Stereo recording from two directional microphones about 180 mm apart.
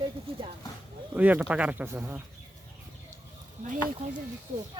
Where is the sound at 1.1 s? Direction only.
10° right (ahead or behind).